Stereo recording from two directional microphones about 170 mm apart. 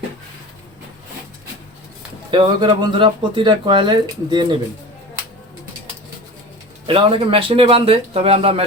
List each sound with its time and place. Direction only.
2.3 s speech: 30° right (ahead or behind)
6.8 s speech: 30° right (ahead or behind)